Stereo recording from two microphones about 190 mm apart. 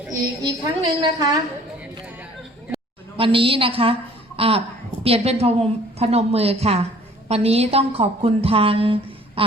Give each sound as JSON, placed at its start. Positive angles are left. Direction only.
{"t": 0.4, "sound": "a woman's voice", "side_deg": -20}
{"t": 3.2, "sound": "a woman's voice", "side_deg": -30}